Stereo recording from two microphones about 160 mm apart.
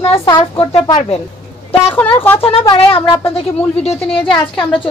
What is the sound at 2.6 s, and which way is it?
Speech, 30° left (ahead or behind).